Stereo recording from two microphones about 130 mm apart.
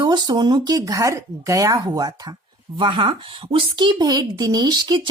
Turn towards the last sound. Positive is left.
turn(degrees=-35)  # may be behind; listen again after turning